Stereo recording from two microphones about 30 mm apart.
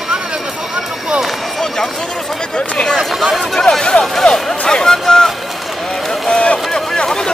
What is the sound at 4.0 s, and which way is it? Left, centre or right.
Speech, centre.